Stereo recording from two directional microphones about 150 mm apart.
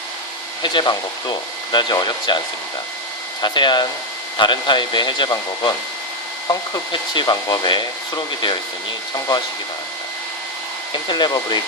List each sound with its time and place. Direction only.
0.6 s speech: 30° left (ahead or behind)
3.4 s speech: 30° left (ahead or behind)
10.9 s speech: 30° left (ahead or behind)